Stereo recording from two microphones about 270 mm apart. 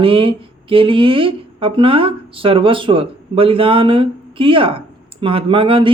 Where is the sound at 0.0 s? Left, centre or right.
Centre.